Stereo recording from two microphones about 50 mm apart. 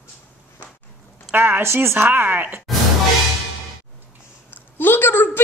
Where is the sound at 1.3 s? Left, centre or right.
Right.